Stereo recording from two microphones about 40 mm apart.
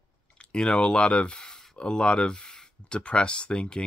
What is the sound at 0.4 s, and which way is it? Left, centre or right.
Speech, left.